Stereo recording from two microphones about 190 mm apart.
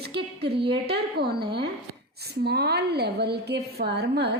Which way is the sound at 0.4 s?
60° right (ahead or behind).